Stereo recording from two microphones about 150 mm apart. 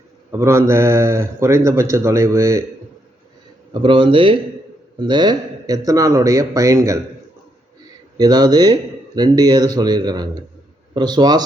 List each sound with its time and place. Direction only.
0.3 s speech: 20° right (ahead or behind)
3.7 s speech: 35° right (ahead or behind)
8.2 s speech: 30° right (ahead or behind)